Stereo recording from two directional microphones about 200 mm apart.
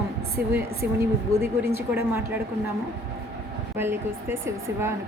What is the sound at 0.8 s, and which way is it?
A woman's voice, 10° right (ahead or behind).